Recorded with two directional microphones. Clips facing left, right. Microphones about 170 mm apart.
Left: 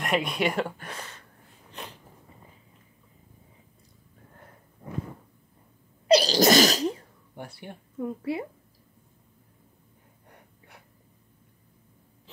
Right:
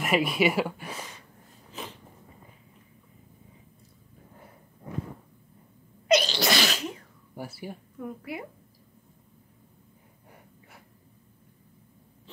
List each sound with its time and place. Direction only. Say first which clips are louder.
0.0 s speech: right 2 dB; 5° right (ahead or behind)
1.7 s a sound: right 2 dB; centre (ahead or behind)
6.0 s sneeze: left 5 dB; 35° left (ahead or behind)
7.3 s speech: right 3 dB; 5° right (ahead or behind)
8.0 s a woman's voice: left 7 dB; 30° left (ahead or behind)